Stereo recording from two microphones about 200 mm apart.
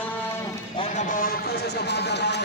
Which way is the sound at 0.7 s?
35° left (ahead or behind).